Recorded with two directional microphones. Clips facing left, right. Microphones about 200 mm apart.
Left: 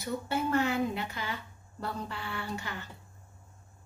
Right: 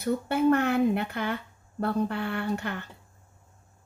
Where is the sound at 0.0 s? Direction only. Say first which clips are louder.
Right 8 dB; 60° right (ahead or behind).